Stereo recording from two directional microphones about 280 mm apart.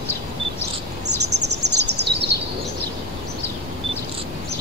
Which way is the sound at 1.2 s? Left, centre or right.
Right.